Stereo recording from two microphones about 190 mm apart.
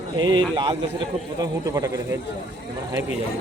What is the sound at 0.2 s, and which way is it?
A man's voice, 25° right (ahead or behind).